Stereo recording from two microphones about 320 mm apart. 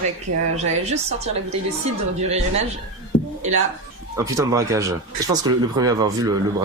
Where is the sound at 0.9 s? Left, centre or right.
Centre.